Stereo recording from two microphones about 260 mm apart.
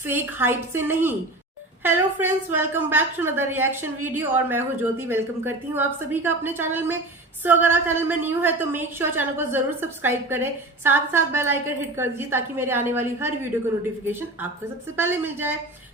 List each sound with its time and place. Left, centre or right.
0.0 s a woman's voice: centre